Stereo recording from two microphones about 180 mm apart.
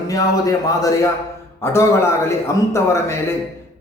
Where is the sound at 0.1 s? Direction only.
20° left (ahead or behind).